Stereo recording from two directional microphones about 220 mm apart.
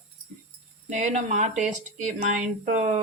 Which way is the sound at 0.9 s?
30° right (ahead or behind).